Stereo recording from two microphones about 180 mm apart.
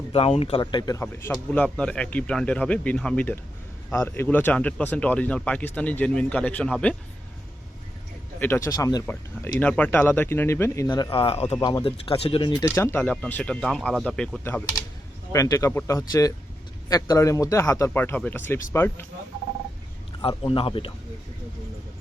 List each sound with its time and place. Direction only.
0.1 s speech: 30° left (ahead or behind)
1.0 s speech: 10° left (ahead or behind)
8.4 s speech: 10° left (ahead or behind)
12.6 s speech: 15° left (ahead or behind)
14.4 s speech: 15° left (ahead or behind)
20.2 s speech: 30° left (ahead or behind)